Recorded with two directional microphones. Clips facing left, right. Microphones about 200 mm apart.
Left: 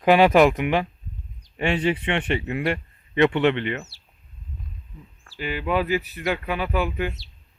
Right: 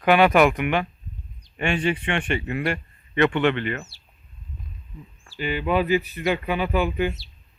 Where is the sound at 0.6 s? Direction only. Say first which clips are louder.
Left 1 dB; 25° left (ahead or behind).